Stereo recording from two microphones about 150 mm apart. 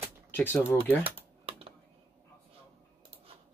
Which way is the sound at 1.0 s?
40° right (ahead or behind).